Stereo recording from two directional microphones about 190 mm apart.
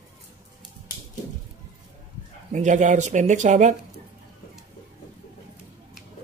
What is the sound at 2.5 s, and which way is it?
Speech, 40° right (ahead or behind).